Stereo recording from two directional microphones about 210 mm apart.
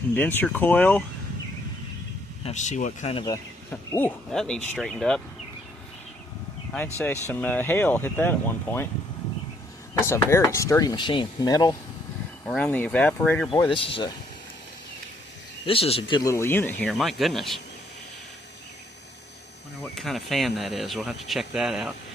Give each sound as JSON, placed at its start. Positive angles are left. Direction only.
{"t": 0.1, "sound": "speech", "side_deg": 10}
{"t": 2.4, "sound": "speech", "side_deg": 35}
{"t": 3.2, "sound": "speech", "side_deg": 15}
{"t": 7.3, "sound": "speech", "side_deg": 10}
{"t": 10.1, "sound": "speech", "side_deg": 10}
{"t": 12.5, "sound": "speech", "side_deg": 5}
{"t": 13.5, "sound": "speech", "side_deg": 20}
{"t": 15.6, "sound": "speech", "side_deg": 25}
{"t": 19.8, "sound": "speech", "side_deg": 0}